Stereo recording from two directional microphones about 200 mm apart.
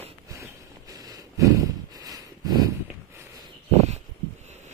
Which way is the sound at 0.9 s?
20° right (ahead or behind).